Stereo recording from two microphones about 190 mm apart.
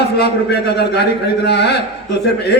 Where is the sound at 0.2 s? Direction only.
60° left (ahead or behind).